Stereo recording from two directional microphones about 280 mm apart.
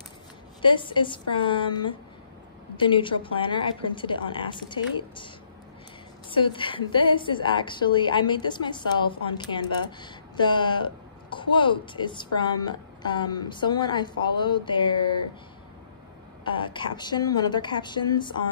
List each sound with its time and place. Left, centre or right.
0.6 s a woman's voice: centre
6.3 s a woman's voice: centre
16.4 s a woman's voice: centre